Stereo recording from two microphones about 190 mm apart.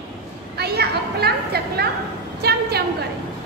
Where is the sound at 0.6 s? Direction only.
55° right (ahead or behind).